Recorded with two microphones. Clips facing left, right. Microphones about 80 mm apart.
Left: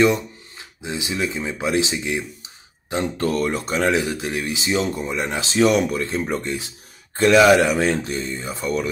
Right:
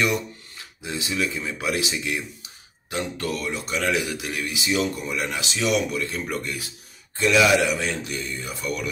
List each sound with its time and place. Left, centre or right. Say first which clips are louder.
0.0 s speech: left 7 dB; left
7.2 s speech: left 5 dB; left